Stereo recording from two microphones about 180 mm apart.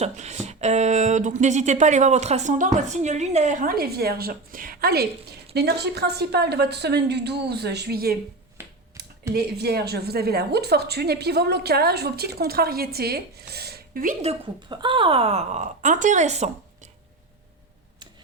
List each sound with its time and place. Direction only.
0.0 s a woman's voice: 40° right (ahead or behind); by 8.1 s 60° right (ahead or behind)
9.3 s a woman's voice: 60° right (ahead or behind); by 14.3 s 40° right (ahead or behind)
14.7 s speech: 25° right (ahead or behind)